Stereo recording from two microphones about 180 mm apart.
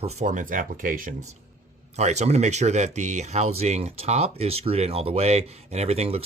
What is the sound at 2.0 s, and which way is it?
Speech, 40° right (ahead or behind).